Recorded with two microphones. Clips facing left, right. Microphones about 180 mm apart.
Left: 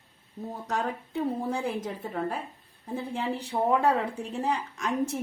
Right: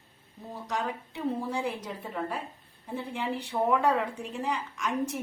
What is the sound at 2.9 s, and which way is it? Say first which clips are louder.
Speech: left 2 dB; 40° left (ahead or behind).